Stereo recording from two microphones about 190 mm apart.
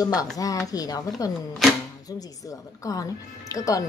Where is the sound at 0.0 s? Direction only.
20° left (ahead or behind).